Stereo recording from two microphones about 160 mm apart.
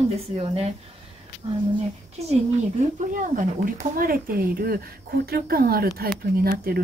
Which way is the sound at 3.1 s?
55° right (ahead or behind).